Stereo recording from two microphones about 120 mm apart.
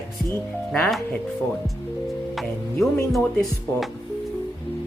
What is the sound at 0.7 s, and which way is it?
Speech, centre (ahead or behind).